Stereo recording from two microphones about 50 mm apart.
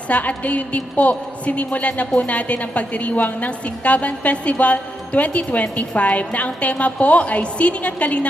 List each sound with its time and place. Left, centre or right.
0.1 s a woman's voice: left